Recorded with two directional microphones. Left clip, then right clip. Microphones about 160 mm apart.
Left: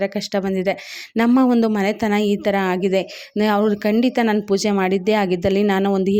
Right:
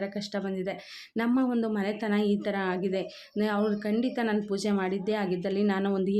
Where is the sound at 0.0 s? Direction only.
55° left (ahead or behind).